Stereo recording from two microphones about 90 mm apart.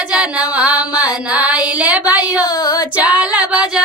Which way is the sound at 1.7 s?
15° right (ahead or behind).